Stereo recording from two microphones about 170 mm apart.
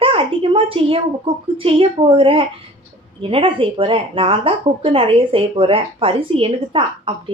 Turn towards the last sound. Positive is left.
turn(degrees=-30)  # may be behind; listen again after turning